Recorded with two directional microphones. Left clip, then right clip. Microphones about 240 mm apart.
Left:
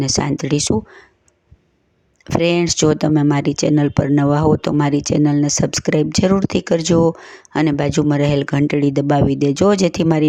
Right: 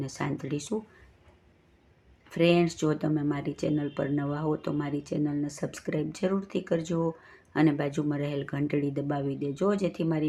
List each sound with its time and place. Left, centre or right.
0.0 s speech: left
2.4 s speech: left